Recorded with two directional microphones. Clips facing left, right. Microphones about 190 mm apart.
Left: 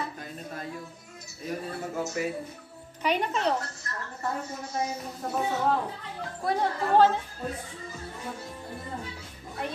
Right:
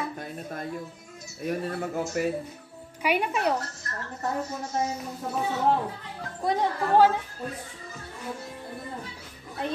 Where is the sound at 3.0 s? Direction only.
10° right (ahead or behind).